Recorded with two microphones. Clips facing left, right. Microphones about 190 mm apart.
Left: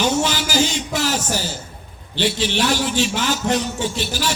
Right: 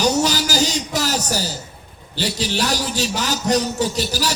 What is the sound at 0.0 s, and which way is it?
A man's voice, 40° right (ahead or behind).